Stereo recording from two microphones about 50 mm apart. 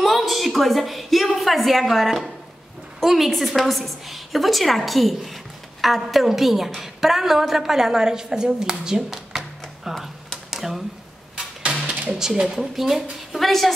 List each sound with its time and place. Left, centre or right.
0.0 s a woman's voice: centre
10.5 s a sound: centre
11.8 s speech: centre
12.5 s a woman's voice: centre